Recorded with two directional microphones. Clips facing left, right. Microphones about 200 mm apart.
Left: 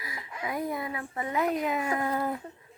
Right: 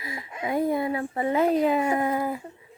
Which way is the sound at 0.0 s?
25° right (ahead or behind).